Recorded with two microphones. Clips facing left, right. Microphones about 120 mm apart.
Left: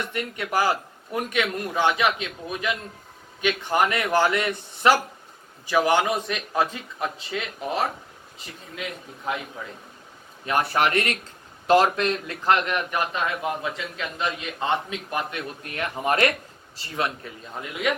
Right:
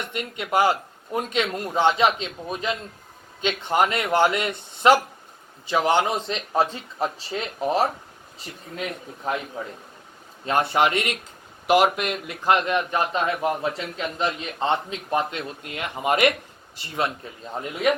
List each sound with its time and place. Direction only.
0.1 s a man's voice: 20° right (ahead or behind); by 9.3 s 35° right (ahead or behind)
10.4 s a man's voice: 25° right (ahead or behind)